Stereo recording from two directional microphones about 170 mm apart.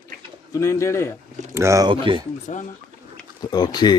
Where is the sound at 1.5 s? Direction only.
15° right (ahead or behind).